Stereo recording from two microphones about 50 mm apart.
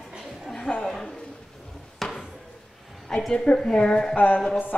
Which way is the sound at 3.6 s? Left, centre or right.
Centre.